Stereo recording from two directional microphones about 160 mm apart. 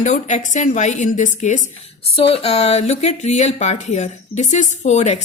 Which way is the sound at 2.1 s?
35° left (ahead or behind).